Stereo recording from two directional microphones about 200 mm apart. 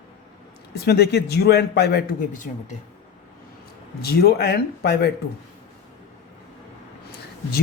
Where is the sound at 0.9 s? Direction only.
55° left (ahead or behind).